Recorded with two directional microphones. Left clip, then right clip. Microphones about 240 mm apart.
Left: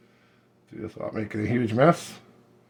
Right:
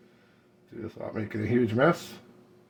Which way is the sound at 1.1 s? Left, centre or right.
Left.